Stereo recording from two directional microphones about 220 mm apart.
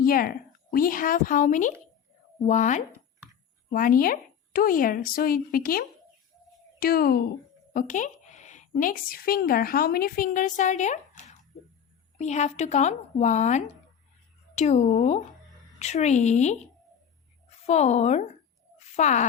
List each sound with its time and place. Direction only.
0.0 s speech: 40° left (ahead or behind)
2.9 s a sound: 15° right (ahead or behind)
3.7 s a child's voice: 40° left (ahead or behind)
17.7 s speech: 30° left (ahead or behind)